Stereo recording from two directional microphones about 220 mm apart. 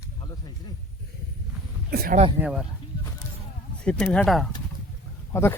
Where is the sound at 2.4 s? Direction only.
Centre (ahead or behind).